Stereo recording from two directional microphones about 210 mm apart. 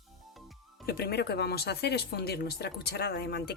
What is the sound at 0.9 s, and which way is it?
Speech, 50° left (ahead or behind).